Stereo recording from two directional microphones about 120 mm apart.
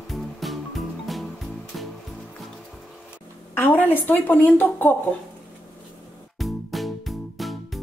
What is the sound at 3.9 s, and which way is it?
Speech, 15° left (ahead or behind).